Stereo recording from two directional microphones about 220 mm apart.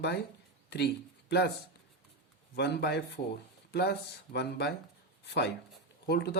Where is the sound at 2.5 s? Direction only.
50° left (ahead or behind).